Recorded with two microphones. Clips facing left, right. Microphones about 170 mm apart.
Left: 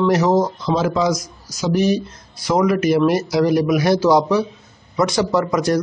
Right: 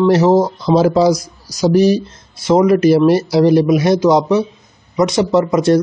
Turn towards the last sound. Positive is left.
turn(degrees=-25)  # may be behind; listen again after turning